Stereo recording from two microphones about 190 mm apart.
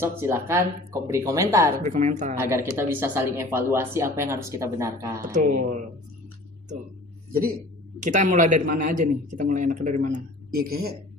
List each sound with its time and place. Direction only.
0.0 s speech: 15° right (ahead or behind)
1.8 s a man's voice: 40° right (ahead or behind)
2.4 s speech: 15° right (ahead or behind)
5.2 s speech: 45° right (ahead or behind)
7.9 s a man's voice: 40° right (ahead or behind)